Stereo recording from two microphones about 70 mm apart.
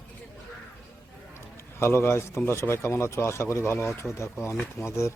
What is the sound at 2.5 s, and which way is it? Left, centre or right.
Speech, left.